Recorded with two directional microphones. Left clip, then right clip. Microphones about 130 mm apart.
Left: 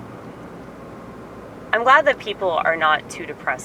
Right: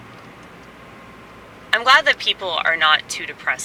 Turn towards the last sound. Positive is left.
turn(degrees=-25)  # may be behind; listen again after turning